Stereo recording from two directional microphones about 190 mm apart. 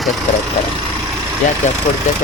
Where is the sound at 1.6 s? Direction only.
40° left (ahead or behind).